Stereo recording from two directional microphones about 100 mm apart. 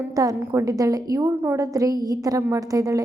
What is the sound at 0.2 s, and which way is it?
A woman's voice, 35° right (ahead or behind).